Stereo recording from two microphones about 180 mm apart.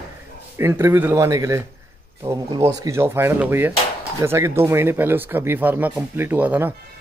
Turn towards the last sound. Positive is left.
turn(degrees=-10)  # may be behind; listen again after turning